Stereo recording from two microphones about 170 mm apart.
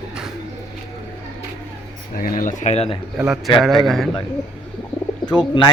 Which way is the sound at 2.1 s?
55° left (ahead or behind).